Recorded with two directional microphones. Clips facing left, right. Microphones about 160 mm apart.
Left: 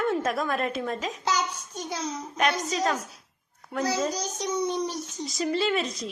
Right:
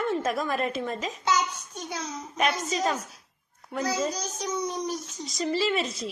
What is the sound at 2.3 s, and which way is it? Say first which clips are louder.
Speech: even; centre (ahead or behind).